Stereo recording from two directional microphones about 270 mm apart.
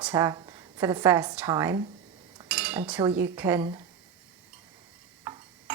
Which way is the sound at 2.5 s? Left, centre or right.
Centre.